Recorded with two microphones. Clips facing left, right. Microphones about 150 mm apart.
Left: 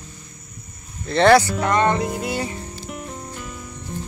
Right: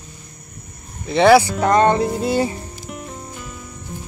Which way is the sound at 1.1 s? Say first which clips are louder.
Right 2 dB; 10° right (ahead or behind).